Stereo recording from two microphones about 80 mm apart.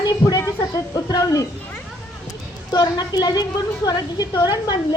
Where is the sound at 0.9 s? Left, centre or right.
Left.